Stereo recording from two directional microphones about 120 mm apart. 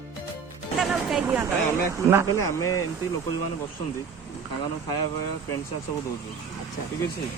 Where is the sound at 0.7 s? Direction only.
Centre (ahead or behind).